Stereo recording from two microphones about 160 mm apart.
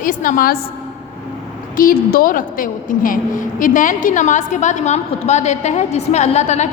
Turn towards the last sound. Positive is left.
turn(degrees=45)  # may be behind; listen again after turning